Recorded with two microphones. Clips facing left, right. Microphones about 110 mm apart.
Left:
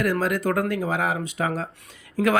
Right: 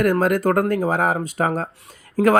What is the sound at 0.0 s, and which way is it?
Speech, 50° right (ahead or behind).